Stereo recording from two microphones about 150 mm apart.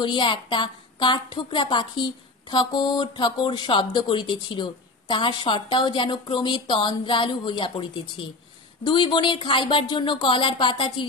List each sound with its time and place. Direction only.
0.0 s speech: 30° left (ahead or behind)